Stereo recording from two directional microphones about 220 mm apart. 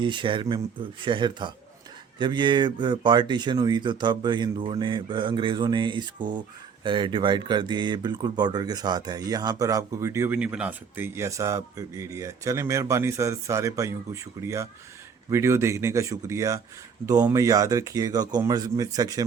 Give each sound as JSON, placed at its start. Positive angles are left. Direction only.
{"t": 0.0, "sound": "speech", "side_deg": -20}